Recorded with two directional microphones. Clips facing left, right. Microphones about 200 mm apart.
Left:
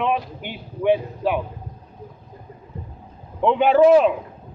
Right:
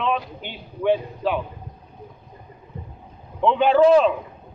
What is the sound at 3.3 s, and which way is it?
Speech, 15° left (ahead or behind).